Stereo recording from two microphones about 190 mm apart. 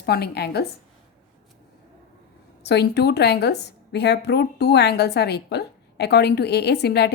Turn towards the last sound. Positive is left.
turn(degrees=60)  # may be behind; listen again after turning